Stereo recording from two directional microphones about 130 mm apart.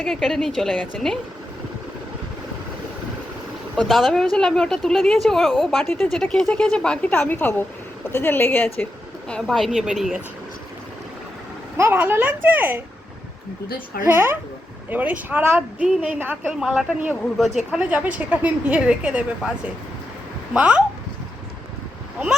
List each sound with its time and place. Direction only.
0.0 s a woman's voice: 5° left (ahead or behind)
3.8 s a woman's voice: centre (ahead or behind)
5.8 s speech: 15° left (ahead or behind)
6.1 s speech: 5° left (ahead or behind)
9.3 s a woman's voice: centre (ahead or behind)
11.8 s a woman's voice: 15° right (ahead or behind)
14.1 s a woman's voice: 20° right (ahead or behind)
16.5 s a woman's voice: 5° right (ahead or behind)
20.5 s a woman's voice: 10° right (ahead or behind)